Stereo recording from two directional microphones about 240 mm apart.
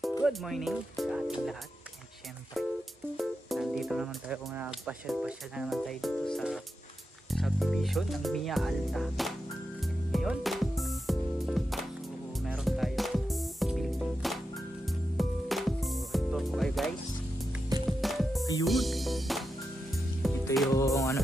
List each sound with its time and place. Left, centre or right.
0.2 s speech: centre
3.2 s speech: centre
10.1 s music: centre
17.7 s music: centre
18.0 s music: centre
20.7 s music: centre